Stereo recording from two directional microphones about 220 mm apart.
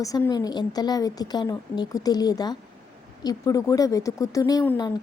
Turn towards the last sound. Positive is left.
turn(degrees=15)  # may be behind; listen again after turning